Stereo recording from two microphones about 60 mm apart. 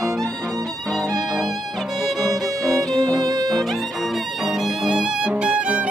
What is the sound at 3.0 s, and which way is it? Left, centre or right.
Music, right.